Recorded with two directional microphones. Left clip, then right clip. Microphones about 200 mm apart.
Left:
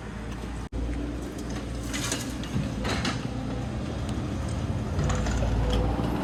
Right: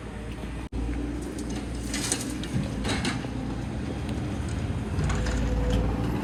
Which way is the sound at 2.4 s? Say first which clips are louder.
Even; centre (ahead or behind).